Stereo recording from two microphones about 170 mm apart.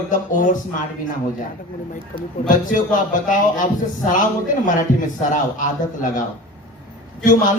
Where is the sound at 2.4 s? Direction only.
50° left (ahead or behind).